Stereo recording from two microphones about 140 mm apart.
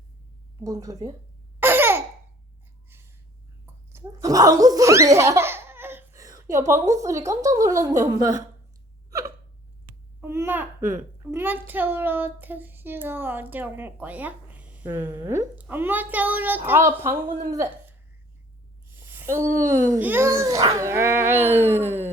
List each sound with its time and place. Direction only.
0.6 s a woman's voice: 25° right (ahead or behind)
1.5 s laughter: 15° right (ahead or behind)
3.9 s laughter: 25° right (ahead or behind)
6.7 s a woman's voice: 20° right (ahead or behind)
9.0 s hiccup: 25° right (ahead or behind)
10.2 s a child's voice: 15° right (ahead or behind)
15.1 s a woman's voice: 25° right (ahead or behind)
15.5 s a child's voice: 10° right (ahead or behind)
20.0 s a child's voice: 15° right (ahead or behind)